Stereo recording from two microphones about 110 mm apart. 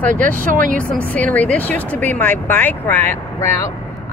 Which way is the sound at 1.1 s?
15° left (ahead or behind).